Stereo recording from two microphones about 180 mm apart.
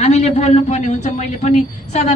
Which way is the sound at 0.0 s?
40° left (ahead or behind).